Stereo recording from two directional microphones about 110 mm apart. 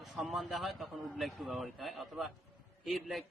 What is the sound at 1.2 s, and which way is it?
A man's voice, centre (ahead or behind).